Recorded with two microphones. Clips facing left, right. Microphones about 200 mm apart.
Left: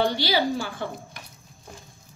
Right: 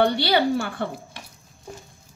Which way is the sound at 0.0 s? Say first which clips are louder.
Right 3 dB; 60° right (ahead or behind).